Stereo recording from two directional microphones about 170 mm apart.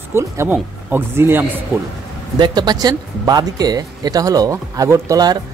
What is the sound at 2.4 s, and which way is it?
Speech, 25° right (ahead or behind).